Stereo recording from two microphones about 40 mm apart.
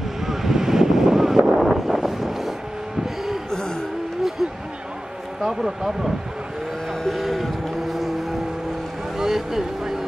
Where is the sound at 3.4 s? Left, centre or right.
Centre.